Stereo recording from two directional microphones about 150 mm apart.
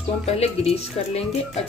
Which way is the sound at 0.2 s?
45° left (ahead or behind).